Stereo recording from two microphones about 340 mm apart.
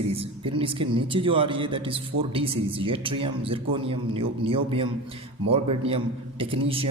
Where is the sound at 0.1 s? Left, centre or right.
Centre.